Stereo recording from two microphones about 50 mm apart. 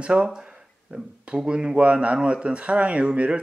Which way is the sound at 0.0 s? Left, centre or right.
Right.